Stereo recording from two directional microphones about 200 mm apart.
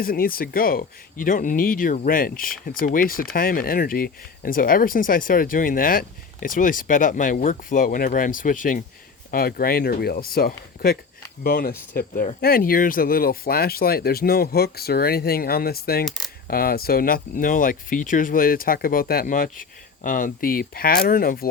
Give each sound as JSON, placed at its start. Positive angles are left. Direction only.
{"t": 0.0, "sound": "speech", "side_deg": 45}
{"t": 16.0, "sound": "coin", "side_deg": 0}
{"t": 16.5, "sound": "speech", "side_deg": 50}